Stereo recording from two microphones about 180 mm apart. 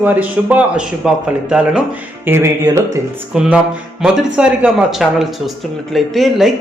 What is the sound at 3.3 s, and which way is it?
Speech, 5° right (ahead or behind).